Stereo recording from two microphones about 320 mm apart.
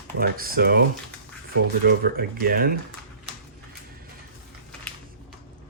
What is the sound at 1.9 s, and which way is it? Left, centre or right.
Speech, right.